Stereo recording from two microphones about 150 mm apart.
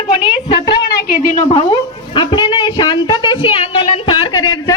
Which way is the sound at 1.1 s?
65° left (ahead or behind).